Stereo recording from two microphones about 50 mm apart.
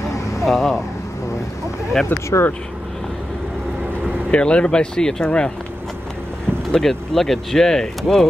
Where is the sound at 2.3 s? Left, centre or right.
Left.